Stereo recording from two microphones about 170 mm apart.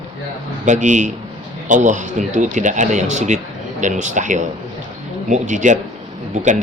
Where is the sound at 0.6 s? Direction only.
45° right (ahead or behind).